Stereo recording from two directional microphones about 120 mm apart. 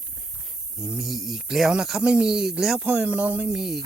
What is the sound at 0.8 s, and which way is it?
A man's voice, 5° right (ahead or behind).